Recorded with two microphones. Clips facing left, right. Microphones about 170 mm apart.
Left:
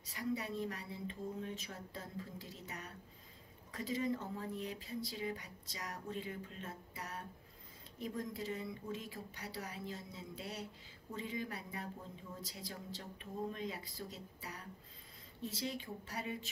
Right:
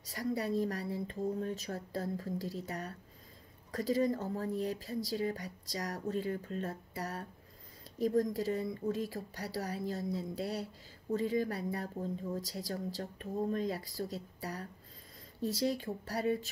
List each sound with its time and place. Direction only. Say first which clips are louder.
0.0 s a woman's voice: right 5 dB; 40° right (ahead or behind)